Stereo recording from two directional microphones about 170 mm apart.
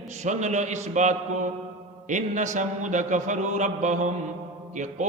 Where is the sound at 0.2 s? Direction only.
45° right (ahead or behind).